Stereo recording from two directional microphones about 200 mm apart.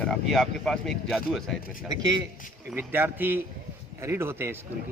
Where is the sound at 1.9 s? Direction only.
20° right (ahead or behind).